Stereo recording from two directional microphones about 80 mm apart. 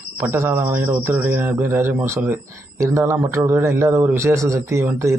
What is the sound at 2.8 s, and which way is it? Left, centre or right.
A man's voice, right.